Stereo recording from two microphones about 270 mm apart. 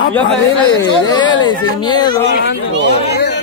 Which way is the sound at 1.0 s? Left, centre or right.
Centre.